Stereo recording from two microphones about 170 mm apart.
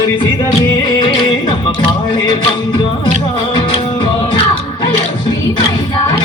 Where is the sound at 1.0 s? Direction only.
25° left (ahead or behind).